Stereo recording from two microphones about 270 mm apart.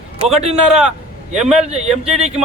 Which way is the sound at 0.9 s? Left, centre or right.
Right.